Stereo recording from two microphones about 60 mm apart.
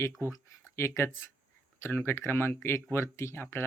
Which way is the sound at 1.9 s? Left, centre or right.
Left.